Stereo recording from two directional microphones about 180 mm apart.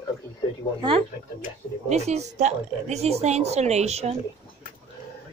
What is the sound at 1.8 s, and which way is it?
A woman's voice, 35° right (ahead or behind).